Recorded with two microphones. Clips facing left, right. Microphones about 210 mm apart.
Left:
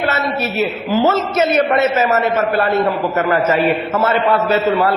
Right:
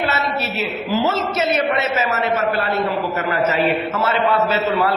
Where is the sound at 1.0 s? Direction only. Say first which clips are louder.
Left 6 dB; 50° left (ahead or behind).